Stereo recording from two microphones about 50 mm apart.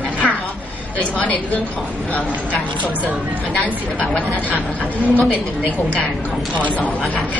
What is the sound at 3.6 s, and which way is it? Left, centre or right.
A woman's voice, left.